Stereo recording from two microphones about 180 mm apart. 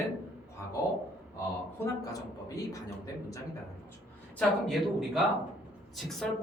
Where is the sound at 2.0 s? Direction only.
20° left (ahead or behind).